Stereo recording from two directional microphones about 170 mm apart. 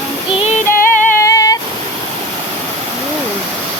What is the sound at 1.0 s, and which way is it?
Female singing, 15° left (ahead or behind).